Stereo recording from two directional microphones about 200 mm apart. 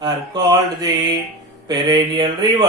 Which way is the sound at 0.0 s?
20° right (ahead or behind).